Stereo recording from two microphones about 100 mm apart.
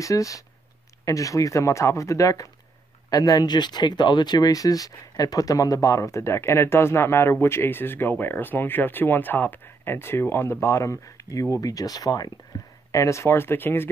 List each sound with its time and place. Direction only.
0.0 s speech: 35° left (ahead or behind)
12.5 s a sound: 40° left (ahead or behind)
12.9 s speech: 30° left (ahead or behind)